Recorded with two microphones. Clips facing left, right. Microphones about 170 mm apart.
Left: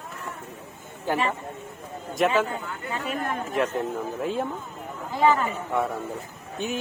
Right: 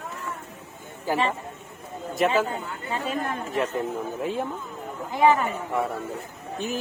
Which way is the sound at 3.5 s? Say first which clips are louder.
Left 1 dB; centre (ahead or behind).